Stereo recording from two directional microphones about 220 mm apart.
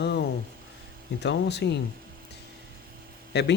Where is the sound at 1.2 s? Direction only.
50° left (ahead or behind).